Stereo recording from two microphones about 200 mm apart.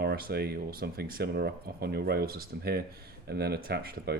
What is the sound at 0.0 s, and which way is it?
Speech, 50° right (ahead or behind).